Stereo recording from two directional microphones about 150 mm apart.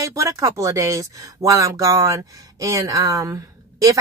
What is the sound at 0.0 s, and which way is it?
Speech, 20° right (ahead or behind).